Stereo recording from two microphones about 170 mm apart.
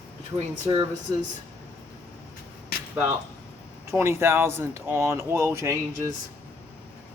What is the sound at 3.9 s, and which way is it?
Speech, 15° right (ahead or behind).